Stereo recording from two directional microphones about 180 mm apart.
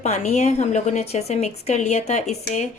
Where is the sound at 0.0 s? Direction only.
40° left (ahead or behind).